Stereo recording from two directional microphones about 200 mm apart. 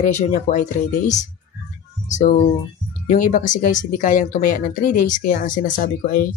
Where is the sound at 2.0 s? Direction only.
40° left (ahead or behind).